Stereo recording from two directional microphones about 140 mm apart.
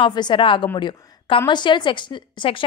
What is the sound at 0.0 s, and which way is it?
A woman's voice, 35° left (ahead or behind).